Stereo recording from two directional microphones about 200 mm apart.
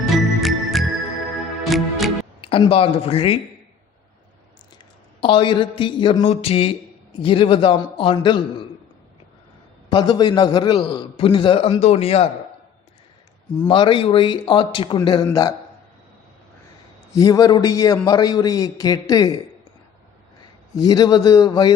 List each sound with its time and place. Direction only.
0.4 s music: centre (ahead or behind)
2.4 s a man's voice: 25° left (ahead or behind)
5.2 s a man's voice: 25° left (ahead or behind)
9.9 s a man's voice: 20° left (ahead or behind)
13.7 s a man's voice: 25° left (ahead or behind)
17.1 s a man's voice: 20° left (ahead or behind)
20.7 s a man's voice: 20° left (ahead or behind)